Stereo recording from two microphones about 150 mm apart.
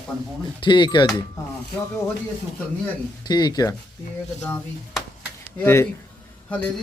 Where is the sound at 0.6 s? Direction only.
30° left (ahead or behind).